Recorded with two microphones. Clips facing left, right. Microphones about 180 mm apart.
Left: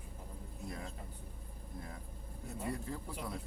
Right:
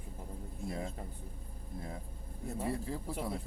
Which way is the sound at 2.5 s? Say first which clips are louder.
Right 3 dB; 30° right (ahead or behind).